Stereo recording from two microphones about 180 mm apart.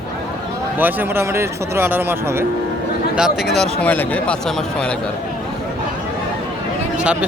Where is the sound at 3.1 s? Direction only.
Centre (ahead or behind).